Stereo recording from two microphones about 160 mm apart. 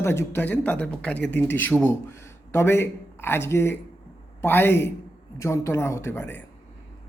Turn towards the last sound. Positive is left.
turn(degrees=15)  # may be behind; listen again after turning